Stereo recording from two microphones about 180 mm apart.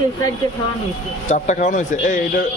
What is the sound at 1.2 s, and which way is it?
Speech, 45° left (ahead or behind).